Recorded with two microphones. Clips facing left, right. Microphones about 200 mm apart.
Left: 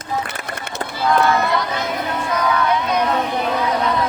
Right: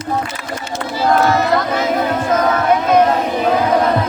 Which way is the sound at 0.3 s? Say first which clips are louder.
Right 4 dB; 60° left (ahead or behind).